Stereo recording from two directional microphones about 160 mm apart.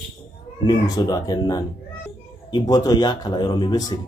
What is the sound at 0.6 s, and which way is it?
Speech, 25° left (ahead or behind).